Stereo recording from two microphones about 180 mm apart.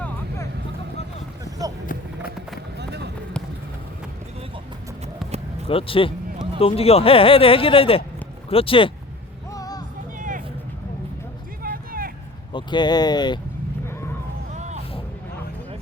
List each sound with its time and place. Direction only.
1.5 s a sound: 20° right (ahead or behind)
2.7 s run: 70° right (ahead or behind)
5.6 s speech: 30° left (ahead or behind)
9.5 s music: 20° left (ahead or behind)
10.2 s music: 45° right (ahead or behind)
11.6 s music: 55° right (ahead or behind)
12.5 s speech: 25° left (ahead or behind)
13.8 s a sound: 15° left (ahead or behind)
14.5 s music: 40° right (ahead or behind)